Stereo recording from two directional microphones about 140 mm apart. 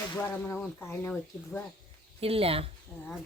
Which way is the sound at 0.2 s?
15° left (ahead or behind).